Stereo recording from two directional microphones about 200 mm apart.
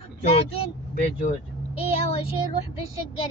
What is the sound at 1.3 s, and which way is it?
Vehicle, 30° left (ahead or behind).